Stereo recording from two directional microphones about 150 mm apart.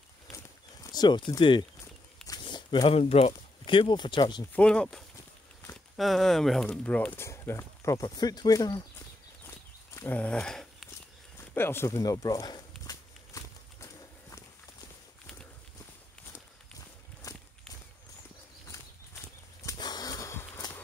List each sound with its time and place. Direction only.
0.9 s speech: 30° left (ahead or behind)
4.6 s speech: 5° left (ahead or behind); by 8.8 s 25° left (ahead or behind)
9.9 s a sound: 10° left (ahead or behind)
11.5 s speech: 15° left (ahead or behind)
12.8 s walk: 20° left (ahead or behind)
17.3 s walk: 25° left (ahead or behind)
19.6 s horse: 25° left (ahead or behind)